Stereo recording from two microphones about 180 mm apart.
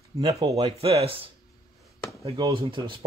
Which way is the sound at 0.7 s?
35° right (ahead or behind).